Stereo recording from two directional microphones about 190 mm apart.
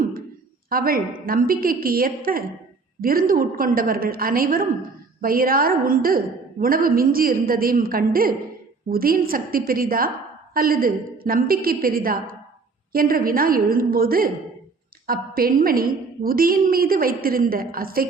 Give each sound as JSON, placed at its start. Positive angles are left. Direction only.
{"t": 0.7, "sound": "a woman's voice", "side_deg": -50}